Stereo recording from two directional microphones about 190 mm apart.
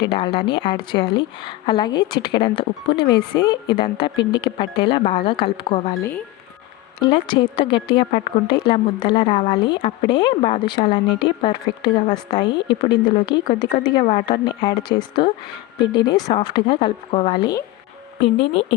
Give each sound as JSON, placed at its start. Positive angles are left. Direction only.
{"t": 0.0, "sound": "a woman's voice", "side_deg": 30}
{"t": 6.0, "sound": "speech", "side_deg": 10}
{"t": 7.0, "sound": "a woman's voice", "side_deg": 25}